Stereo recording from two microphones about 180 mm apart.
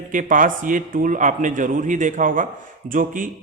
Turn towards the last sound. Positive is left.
turn(degrees=-50)  # may be behind; listen again after turning